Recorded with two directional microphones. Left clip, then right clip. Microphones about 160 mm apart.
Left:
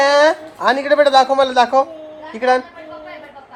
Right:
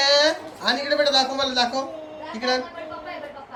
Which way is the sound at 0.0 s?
Centre (ahead or behind).